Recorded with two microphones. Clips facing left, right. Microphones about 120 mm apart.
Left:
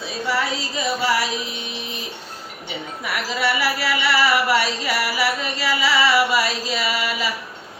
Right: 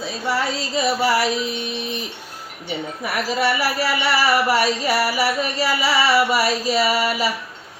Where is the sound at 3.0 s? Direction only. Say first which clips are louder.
Right 2 dB; 40° right (ahead or behind).